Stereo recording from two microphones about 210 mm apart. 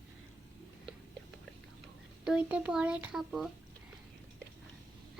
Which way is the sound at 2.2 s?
5° right (ahead or behind).